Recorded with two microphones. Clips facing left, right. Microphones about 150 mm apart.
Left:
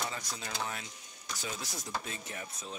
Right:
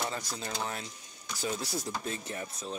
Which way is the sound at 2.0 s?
35° right (ahead or behind).